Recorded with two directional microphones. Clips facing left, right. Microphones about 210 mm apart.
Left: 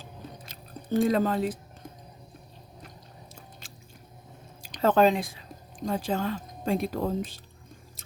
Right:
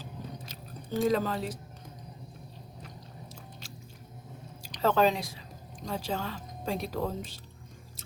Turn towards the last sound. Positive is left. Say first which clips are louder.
# left 4 dB
turn(degrees=50)  # may be behind; listen again after turning